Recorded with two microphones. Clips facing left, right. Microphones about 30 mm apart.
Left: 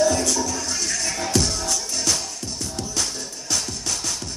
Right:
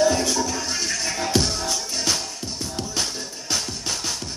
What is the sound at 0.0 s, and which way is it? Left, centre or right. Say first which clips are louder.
Music: even; right.